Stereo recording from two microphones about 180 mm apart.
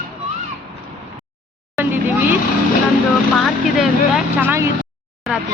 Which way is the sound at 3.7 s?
5° right (ahead or behind).